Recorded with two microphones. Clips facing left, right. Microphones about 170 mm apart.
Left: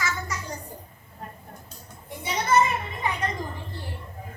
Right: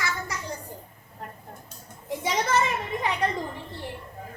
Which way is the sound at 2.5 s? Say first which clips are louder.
Left 5 dB; 90° right.